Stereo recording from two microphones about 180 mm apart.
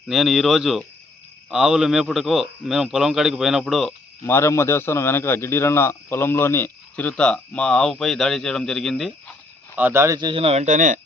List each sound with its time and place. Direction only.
0.1 s a man's voice: centre (ahead or behind)
4.3 s a man's voice: 15° left (ahead or behind)
9.7 s speech: 10° right (ahead or behind); by 11.0 s 45° right (ahead or behind)